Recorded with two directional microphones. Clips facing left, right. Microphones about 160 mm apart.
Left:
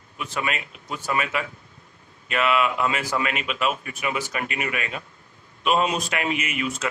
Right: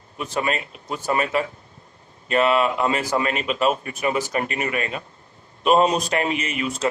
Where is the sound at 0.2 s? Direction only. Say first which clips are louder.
Right 4 dB; 40° right (ahead or behind).